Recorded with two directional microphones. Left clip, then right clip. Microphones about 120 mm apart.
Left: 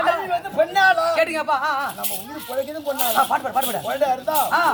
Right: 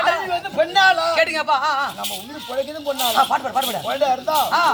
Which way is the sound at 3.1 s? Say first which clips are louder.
Right 1 dB; 5° right (ahead or behind).